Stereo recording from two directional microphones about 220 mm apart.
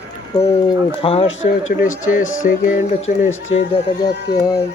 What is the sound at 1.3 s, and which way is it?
Speech, 60° left (ahead or behind).